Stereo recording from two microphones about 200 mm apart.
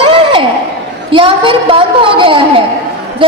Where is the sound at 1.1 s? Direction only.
25° right (ahead or behind).